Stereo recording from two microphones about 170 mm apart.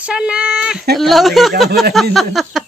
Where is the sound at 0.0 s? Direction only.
5° right (ahead or behind).